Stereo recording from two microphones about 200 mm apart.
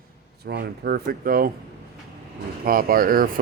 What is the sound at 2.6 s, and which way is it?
Speech, 45° right (ahead or behind).